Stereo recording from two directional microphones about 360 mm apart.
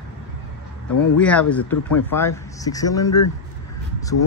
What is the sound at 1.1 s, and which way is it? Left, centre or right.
Speech, centre.